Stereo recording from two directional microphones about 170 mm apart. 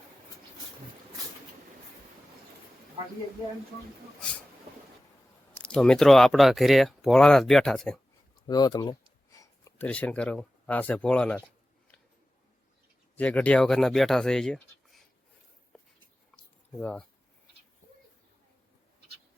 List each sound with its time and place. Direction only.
5.6 s speech: 5° left (ahead or behind)
8.4 s speech: 25° left (ahead or behind)
9.4 s speech: 15° left (ahead or behind)
13.1 s speech: 10° left (ahead or behind)
15.7 s a sound: centre (ahead or behind)
16.8 s speech: 5° left (ahead or behind)